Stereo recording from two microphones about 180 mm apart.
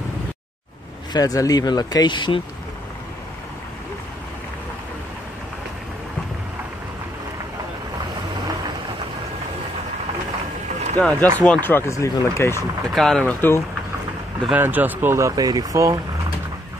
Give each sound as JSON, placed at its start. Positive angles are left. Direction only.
{"t": 1.1, "sound": "speech", "side_deg": 20}
{"t": 11.0, "sound": "speech", "side_deg": 10}
{"t": 12.9, "sound": "speech", "side_deg": 0}
{"t": 14.5, "sound": "speech", "side_deg": -10}